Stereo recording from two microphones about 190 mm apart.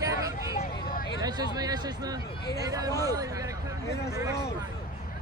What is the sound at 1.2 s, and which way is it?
Speech, 20° right (ahead or behind).